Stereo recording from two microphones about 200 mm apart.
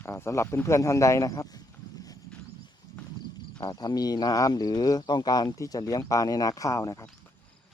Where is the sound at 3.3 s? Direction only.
20° left (ahead or behind).